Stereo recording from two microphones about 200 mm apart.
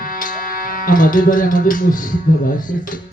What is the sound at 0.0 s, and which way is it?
Music, 45° left (ahead or behind).